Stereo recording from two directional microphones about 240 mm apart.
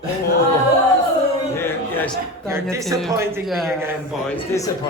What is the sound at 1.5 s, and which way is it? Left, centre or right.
Music, centre.